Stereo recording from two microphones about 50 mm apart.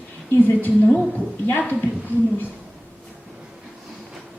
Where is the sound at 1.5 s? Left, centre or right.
Left.